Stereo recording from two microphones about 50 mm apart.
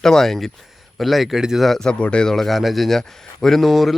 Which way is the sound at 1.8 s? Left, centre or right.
Centre.